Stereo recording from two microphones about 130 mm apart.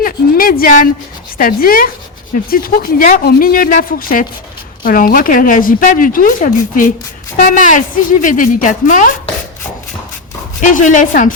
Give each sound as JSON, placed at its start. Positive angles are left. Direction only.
{"t": 0.0, "sound": "a woman's voice", "side_deg": 90}
{"t": 10.6, "sound": "a woman's voice", "side_deg": 80}